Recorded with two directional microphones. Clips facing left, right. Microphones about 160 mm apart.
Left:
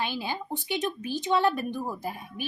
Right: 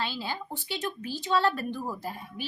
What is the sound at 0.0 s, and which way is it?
A child's voice, 15° left (ahead or behind).